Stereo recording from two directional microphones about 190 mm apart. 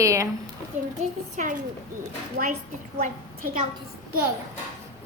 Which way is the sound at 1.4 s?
45° right (ahead or behind).